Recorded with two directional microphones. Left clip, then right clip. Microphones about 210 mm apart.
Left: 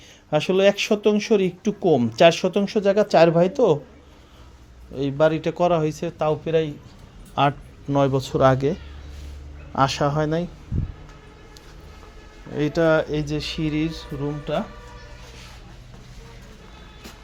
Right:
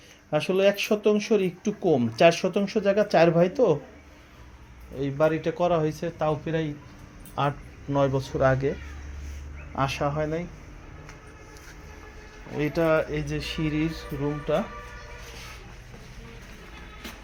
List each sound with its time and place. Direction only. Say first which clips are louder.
0.3 s speech: left 4 dB; 30° left (ahead or behind)
4.9 s speech: left 4 dB; 35° left (ahead or behind)
9.7 s speech: left 6 dB; 35° left (ahead or behind)
12.5 s speech: left 4 dB; 25° left (ahead or behind)